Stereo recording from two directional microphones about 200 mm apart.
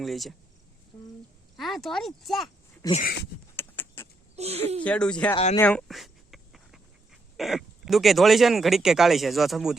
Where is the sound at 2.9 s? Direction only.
45° left (ahead or behind).